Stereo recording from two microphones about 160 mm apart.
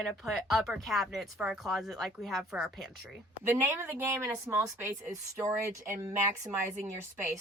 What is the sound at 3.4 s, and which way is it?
Speech, 15° right (ahead or behind).